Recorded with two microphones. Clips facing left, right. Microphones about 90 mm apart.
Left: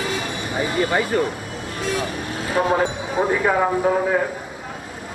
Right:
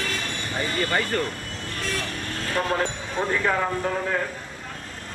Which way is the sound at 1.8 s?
10° left (ahead or behind).